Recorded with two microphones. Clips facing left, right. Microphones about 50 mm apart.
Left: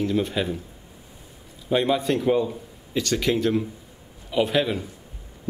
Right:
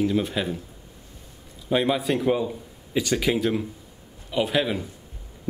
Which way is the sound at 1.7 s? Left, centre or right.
Centre.